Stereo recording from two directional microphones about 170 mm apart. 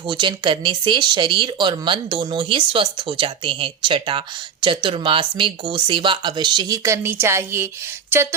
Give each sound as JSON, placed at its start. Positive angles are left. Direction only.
{"t": 0.1, "sound": "speech", "side_deg": -25}